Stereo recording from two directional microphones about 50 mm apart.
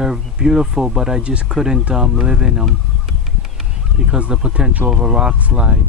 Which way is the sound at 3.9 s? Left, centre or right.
Centre.